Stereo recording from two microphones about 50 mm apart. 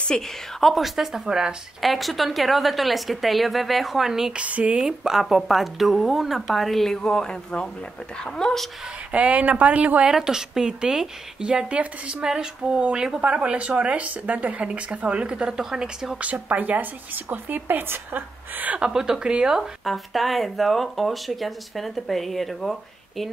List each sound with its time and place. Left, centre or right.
0.1 s speech: centre
0.6 s speech: centre
1.2 s a woman's voice: centre
1.8 s speech: centre
4.4 s speech: right
4.8 s speech: centre
9.1 s speech: right
10.0 s a woman's voice: centre
11.7 s speech: right
12.2 s a woman's voice: centre
16.2 s speech: right
18.9 s a woman's voice: centre
19.5 s speech: centre